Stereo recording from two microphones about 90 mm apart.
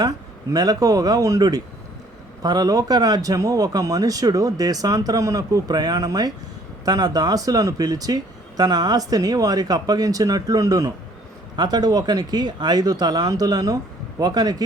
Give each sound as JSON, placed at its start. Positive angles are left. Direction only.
{"t": 0.5, "sound": "speech", "side_deg": -45}